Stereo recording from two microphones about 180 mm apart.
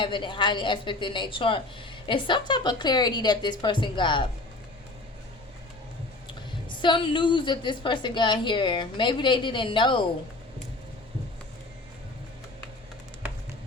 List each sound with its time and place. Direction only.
0.0 s a woman's voice: 25° left (ahead or behind)
6.7 s a woman's voice: 25° left (ahead or behind)